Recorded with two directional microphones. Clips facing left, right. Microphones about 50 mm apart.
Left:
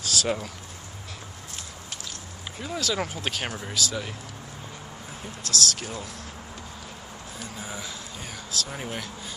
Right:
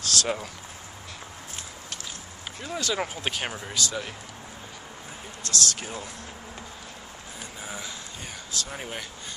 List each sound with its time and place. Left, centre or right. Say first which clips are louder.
0.1 s speech: left 1 dB; centre
2.6 s speech: left 1 dB; centre
5.4 s speech: left 1 dB; centre
7.3 s a sound: left 1 dB; centre
8.5 s speech: left 2 dB; centre